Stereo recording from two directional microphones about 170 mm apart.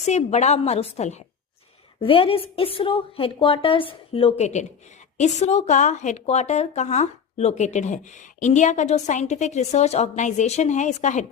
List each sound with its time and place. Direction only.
0.0 s a woman's voice: 40° left (ahead or behind)